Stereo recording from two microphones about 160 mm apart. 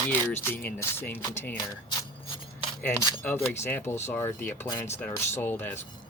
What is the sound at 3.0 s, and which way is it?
Speech, 15° left (ahead or behind).